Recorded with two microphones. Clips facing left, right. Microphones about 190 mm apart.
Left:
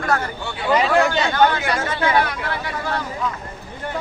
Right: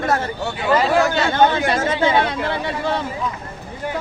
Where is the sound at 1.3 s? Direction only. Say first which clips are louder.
Right 3 dB; 25° right (ahead or behind).